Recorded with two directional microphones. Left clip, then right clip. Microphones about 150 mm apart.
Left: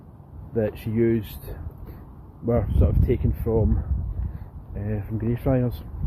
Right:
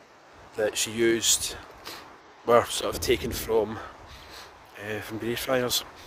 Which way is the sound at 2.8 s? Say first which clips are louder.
Even; 55° right (ahead or behind).